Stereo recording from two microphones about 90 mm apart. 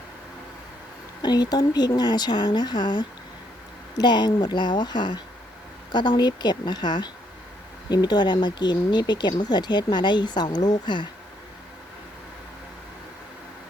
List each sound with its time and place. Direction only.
1.2 s a woman's voice: 50° left (ahead or behind)